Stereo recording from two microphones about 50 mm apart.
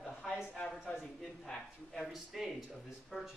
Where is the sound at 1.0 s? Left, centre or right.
Centre.